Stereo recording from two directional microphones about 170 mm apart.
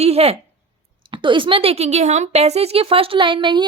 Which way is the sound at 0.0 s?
35° right (ahead or behind).